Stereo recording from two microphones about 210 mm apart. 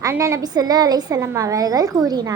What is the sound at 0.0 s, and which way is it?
Speech, 15° right (ahead or behind).